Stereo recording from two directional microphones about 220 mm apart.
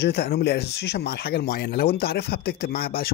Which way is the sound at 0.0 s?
50° left (ahead or behind).